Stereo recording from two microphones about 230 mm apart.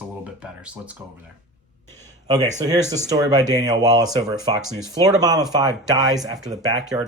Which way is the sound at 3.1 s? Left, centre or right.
Centre.